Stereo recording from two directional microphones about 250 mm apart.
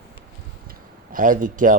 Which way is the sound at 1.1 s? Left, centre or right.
Right.